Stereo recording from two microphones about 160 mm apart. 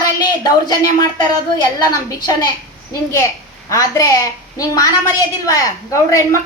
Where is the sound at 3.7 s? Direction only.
20° left (ahead or behind).